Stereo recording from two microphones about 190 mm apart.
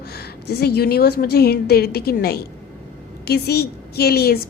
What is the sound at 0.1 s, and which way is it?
A woman's voice, 55° left (ahead or behind).